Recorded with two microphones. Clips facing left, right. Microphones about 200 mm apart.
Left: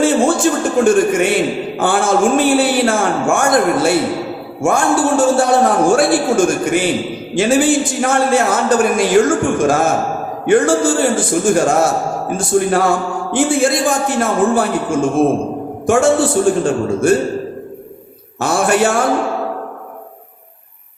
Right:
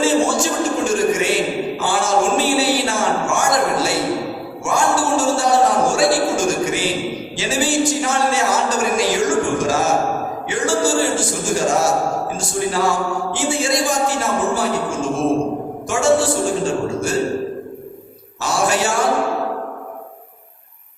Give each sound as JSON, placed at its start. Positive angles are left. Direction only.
{"t": 0.0, "sound": "a sound", "side_deg": 55}
{"t": 1.8, "sound": "a man's voice", "side_deg": 55}
{"t": 18.3, "sound": "a man's voice", "side_deg": 55}